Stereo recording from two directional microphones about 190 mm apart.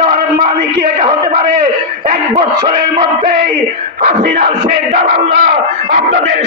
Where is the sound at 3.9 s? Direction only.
45° right (ahead or behind).